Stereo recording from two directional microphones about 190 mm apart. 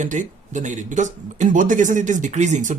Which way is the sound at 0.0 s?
40° right (ahead or behind).